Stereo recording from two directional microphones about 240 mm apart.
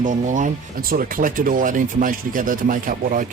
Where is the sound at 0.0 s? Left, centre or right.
Right.